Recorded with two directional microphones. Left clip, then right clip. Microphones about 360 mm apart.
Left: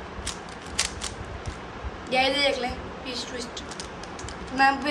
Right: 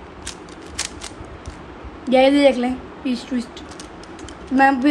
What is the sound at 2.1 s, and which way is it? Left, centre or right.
A woman's voice, centre.